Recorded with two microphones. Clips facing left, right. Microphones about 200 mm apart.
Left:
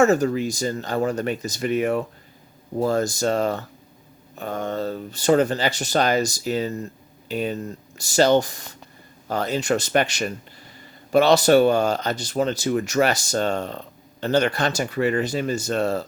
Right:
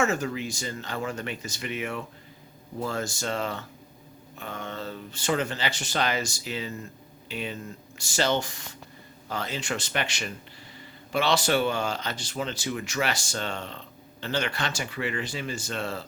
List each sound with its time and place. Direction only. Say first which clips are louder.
0.0 s speech: left 9 dB; 40° left (ahead or behind)